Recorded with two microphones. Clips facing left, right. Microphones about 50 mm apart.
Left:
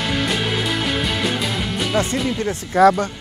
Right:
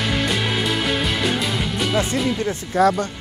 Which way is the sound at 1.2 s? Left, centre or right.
Centre.